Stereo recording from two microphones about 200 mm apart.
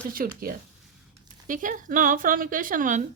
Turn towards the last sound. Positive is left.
turn(degrees=-40)  # may be behind; listen again after turning